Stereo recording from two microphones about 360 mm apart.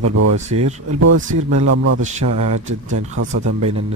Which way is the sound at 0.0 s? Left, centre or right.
Right.